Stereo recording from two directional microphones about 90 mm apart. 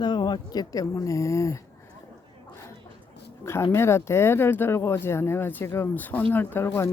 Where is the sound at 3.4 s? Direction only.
30° left (ahead or behind).